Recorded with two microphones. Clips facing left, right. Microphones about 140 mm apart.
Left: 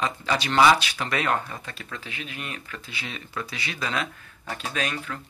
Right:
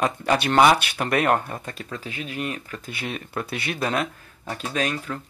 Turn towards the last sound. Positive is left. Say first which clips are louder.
# right 4 dB
turn(degrees=-40)  # may be behind; listen again after turning